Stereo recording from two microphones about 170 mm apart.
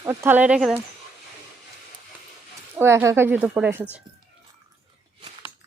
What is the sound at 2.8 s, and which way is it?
Speech, 15° right (ahead or behind).